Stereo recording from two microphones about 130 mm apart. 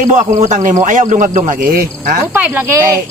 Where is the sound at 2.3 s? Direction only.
20° right (ahead or behind).